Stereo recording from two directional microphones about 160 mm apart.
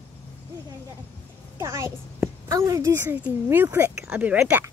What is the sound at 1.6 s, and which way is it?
A woman's voice, 15° right (ahead or behind).